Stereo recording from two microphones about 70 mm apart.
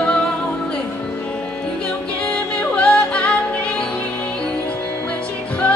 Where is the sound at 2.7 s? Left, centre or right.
Centre.